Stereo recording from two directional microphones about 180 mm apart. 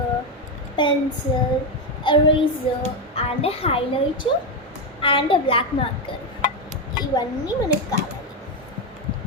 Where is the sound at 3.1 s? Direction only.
35° left (ahead or behind).